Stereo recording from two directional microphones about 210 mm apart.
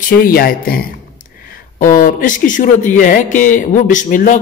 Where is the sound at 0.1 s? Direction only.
45° left (ahead or behind).